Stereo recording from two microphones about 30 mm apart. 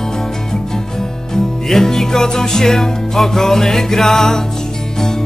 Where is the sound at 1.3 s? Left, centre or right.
Centre.